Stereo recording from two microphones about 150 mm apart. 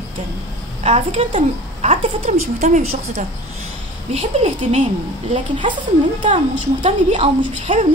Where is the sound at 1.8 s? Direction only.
50° right (ahead or behind).